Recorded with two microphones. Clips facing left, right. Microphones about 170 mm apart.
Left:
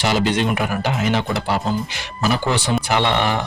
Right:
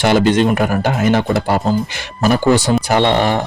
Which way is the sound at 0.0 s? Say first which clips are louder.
Right 6 dB; 50° right (ahead or behind).